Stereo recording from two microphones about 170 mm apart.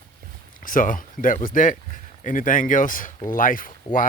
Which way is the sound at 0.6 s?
55° left (ahead or behind).